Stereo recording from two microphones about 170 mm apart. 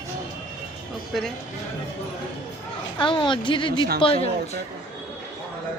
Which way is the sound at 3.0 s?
30° left (ahead or behind).